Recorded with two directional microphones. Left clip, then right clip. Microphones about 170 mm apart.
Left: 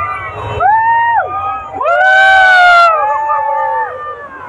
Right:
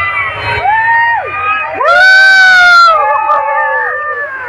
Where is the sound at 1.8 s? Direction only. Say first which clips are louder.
Right 3 dB; 60° right (ahead or behind).